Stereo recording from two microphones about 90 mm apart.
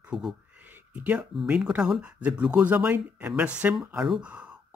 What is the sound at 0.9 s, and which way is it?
A man's voice, 15° right (ahead or behind).